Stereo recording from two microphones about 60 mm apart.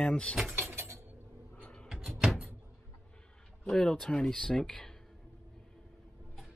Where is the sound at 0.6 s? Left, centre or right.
Right.